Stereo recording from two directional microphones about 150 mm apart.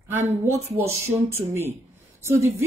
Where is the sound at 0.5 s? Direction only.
15° right (ahead or behind).